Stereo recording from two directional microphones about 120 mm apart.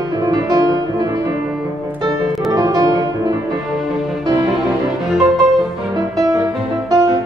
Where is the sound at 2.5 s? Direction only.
30° right (ahead or behind).